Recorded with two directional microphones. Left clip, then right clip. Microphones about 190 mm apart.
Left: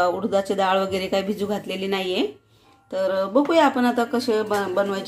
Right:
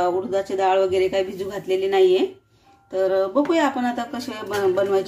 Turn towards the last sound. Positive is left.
turn(degrees=35)  # may be behind; listen again after turning